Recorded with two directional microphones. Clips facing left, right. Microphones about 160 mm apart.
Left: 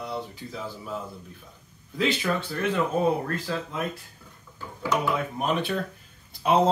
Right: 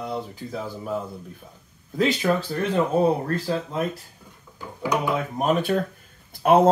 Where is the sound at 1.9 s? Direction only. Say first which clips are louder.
Right 4 dB; 45° right (ahead or behind).